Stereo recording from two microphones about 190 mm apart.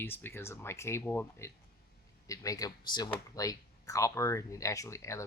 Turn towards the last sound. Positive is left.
turn(degrees=15)  # may be behind; listen again after turning